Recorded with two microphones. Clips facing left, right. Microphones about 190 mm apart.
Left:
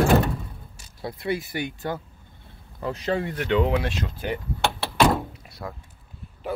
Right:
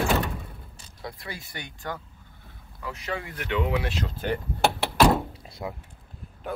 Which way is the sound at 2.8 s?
35° left (ahead or behind).